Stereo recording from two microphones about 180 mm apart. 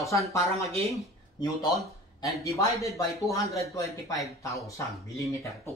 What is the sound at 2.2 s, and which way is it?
Speech, 15° left (ahead or behind).